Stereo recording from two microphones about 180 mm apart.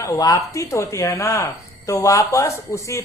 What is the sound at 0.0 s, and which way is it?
A man's voice, 20° left (ahead or behind).